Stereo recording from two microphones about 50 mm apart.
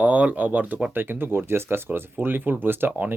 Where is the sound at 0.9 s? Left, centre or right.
Right.